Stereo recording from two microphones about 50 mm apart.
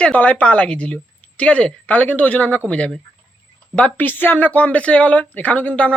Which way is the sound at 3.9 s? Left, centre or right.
Left.